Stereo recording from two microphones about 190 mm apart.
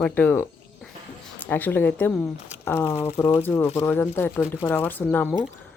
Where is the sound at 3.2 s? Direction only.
10° left (ahead or behind).